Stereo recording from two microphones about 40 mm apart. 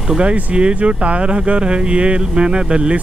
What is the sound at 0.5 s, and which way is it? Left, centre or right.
Speech, right.